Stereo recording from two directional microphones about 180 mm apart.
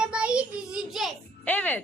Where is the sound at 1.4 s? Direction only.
10° left (ahead or behind).